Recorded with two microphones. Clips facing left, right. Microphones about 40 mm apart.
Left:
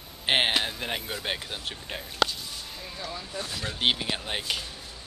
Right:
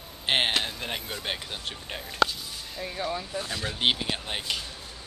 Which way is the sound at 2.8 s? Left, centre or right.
Right.